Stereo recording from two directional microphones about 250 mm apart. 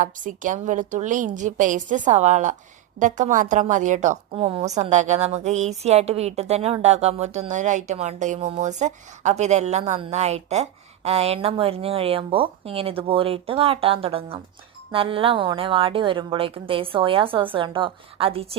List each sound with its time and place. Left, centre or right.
0.0 s a woman's voice: right